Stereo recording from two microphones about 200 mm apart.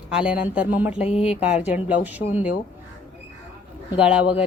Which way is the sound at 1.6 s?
35° left (ahead or behind).